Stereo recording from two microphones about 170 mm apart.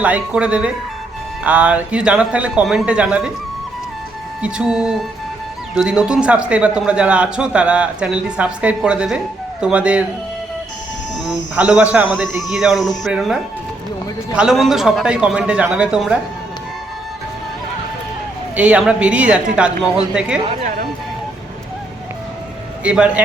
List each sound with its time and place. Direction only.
0.0 s speech: 10° right (ahead or behind)
4.4 s a man's voice: 5° right (ahead or behind)
11.3 s a man's voice: 5° right (ahead or behind)
18.5 s a man's voice: 5° right (ahead or behind)
22.8 s speech: 5° right (ahead or behind)